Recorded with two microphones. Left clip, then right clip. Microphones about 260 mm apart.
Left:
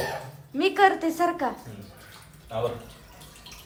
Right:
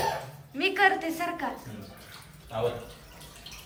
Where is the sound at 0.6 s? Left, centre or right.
Centre.